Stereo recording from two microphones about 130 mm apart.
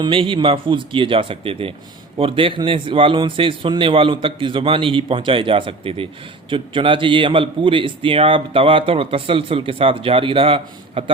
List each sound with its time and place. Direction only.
0.0 s a man's voice: 40° right (ahead or behind)